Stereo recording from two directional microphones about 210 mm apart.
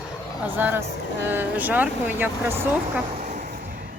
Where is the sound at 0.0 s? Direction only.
10° right (ahead or behind).